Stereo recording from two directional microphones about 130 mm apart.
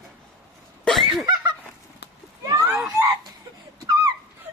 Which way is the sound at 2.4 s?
25° right (ahead or behind).